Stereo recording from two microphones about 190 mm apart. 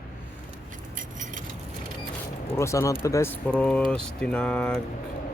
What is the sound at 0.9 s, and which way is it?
Keys jangling, 45° right (ahead or behind).